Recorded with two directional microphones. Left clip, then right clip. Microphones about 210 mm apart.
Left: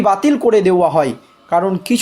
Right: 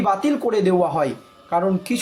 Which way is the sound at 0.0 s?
40° left (ahead or behind).